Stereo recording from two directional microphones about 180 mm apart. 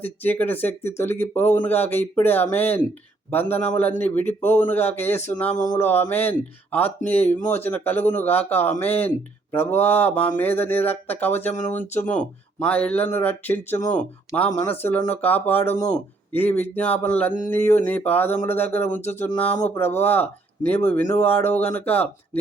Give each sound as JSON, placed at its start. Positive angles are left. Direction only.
{"t": 0.0, "sound": "speech", "side_deg": 10}